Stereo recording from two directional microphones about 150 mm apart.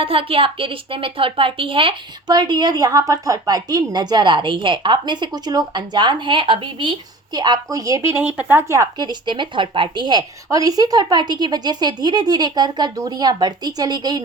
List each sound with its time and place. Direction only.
0.0 s speech: 40° right (ahead or behind)